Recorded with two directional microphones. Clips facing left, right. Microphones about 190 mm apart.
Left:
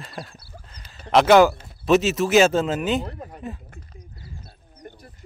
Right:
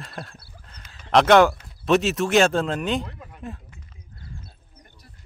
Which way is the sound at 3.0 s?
40° left (ahead or behind).